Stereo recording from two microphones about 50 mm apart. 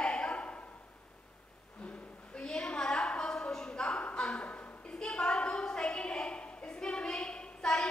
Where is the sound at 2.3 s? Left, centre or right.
Centre.